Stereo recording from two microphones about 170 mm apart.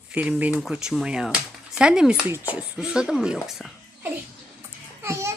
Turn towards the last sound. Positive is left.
turn(degrees=-15)  # may be behind; listen again after turning